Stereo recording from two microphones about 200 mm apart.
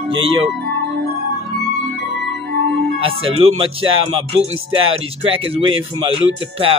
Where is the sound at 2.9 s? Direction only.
30° right (ahead or behind).